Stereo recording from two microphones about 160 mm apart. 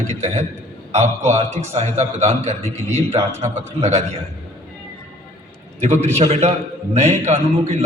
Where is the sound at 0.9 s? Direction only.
45° right (ahead or behind).